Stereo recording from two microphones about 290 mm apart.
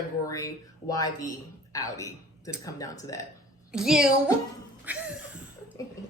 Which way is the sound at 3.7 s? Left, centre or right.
Centre.